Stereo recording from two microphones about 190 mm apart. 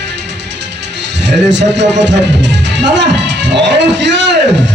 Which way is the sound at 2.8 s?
70° right (ahead or behind).